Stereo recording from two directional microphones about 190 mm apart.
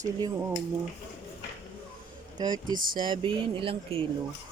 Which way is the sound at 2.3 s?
20° right (ahead or behind).